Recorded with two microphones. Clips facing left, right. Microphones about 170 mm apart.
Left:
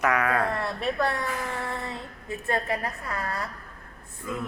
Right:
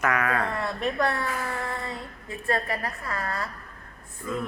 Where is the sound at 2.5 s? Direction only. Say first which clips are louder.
Even; 20° left (ahead or behind).